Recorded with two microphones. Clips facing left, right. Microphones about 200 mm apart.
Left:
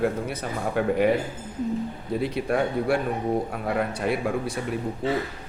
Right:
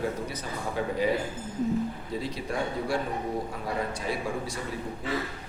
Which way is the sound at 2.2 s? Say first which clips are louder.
Left 8 dB; 60° left (ahead or behind).